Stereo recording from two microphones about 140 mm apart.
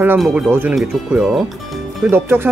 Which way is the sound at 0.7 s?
Centre (ahead or behind).